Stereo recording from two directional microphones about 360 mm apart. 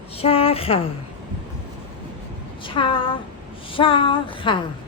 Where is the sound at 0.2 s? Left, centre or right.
Centre.